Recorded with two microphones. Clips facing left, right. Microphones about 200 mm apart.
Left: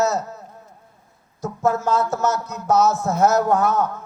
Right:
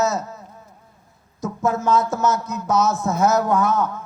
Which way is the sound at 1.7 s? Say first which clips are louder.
Right 1 dB; 65° left (ahead or behind).